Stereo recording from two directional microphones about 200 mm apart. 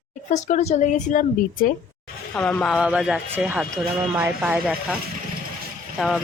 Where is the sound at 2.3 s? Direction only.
5° left (ahead or behind).